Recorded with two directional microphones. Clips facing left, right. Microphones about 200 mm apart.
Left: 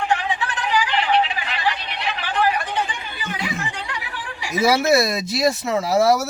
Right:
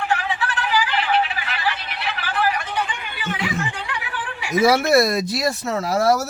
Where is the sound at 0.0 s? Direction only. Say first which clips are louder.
Left 1 dB; 15° left (ahead or behind).